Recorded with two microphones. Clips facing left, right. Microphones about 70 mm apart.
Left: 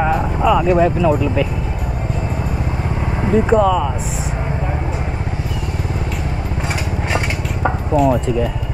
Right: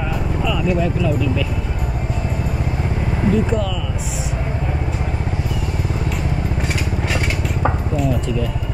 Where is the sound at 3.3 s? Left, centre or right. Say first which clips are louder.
Left 7 dB; left.